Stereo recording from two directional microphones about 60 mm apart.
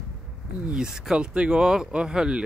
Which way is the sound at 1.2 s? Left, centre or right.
Centre.